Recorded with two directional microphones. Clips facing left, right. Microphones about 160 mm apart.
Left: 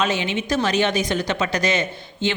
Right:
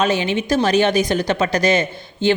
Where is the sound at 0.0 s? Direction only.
35° right (ahead or behind).